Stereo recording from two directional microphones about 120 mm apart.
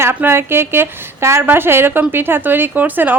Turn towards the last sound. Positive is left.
turn(degrees=-15)  # may be behind; listen again after turning